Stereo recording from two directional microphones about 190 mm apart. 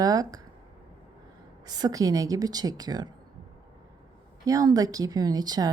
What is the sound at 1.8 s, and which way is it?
A woman's voice, 20° right (ahead or behind).